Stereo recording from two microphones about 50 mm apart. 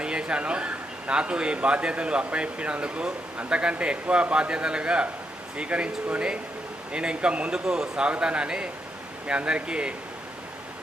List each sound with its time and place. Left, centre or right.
0.0 s speech: right